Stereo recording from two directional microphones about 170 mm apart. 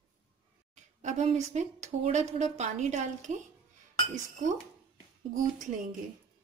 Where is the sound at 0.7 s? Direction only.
45° right (ahead or behind).